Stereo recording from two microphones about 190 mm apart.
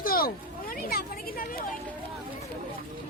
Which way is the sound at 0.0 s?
50° left (ahead or behind).